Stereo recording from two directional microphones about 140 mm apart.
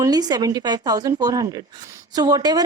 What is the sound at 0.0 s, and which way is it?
A woman's voice, 30° right (ahead or behind).